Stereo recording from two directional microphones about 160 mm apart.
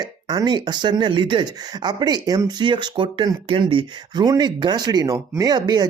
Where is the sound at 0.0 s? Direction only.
25° right (ahead or behind).